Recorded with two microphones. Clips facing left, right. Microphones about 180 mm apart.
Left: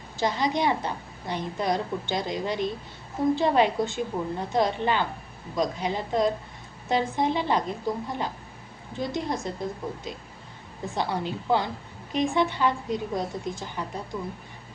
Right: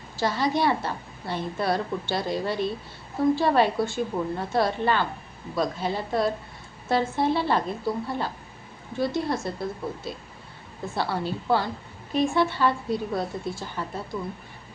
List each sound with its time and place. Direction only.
0.2 s a woman's voice: 20° left (ahead or behind)
10.8 s a woman's voice: 15° left (ahead or behind)